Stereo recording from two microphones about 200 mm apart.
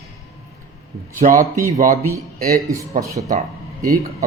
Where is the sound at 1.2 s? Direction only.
40° right (ahead or behind).